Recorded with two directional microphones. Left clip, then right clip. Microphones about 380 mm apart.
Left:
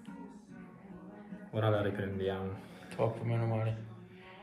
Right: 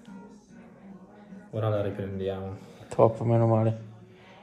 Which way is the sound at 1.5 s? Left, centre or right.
Centre.